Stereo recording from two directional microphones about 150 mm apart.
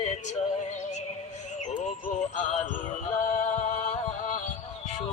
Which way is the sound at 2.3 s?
55° left (ahead or behind).